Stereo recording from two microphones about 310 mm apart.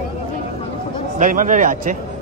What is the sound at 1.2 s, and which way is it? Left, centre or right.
Speech, right.